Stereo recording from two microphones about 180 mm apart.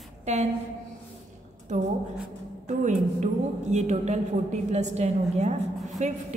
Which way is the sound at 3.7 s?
40° right (ahead or behind).